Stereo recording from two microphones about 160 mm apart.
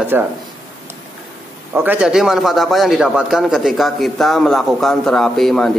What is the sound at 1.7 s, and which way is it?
A man's voice, 10° right (ahead or behind).